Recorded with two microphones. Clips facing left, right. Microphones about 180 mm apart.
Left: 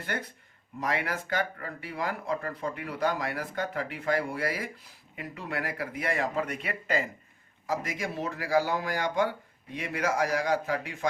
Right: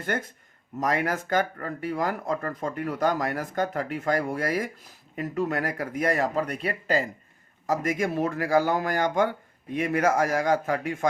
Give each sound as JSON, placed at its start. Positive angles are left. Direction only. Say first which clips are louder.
{"t": 0.0, "sound": "speech", "louder": "right 5 dB", "side_deg": -45}
{"t": 7.7, "sound": "speech", "louder": "right 6 dB", "side_deg": -50}